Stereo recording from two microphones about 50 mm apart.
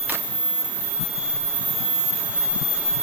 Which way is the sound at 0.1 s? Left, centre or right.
Right.